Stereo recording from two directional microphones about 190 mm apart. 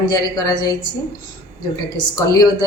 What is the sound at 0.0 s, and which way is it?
Speech, 20° left (ahead or behind).